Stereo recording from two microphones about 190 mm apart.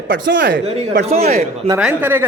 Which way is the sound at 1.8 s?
10° right (ahead or behind).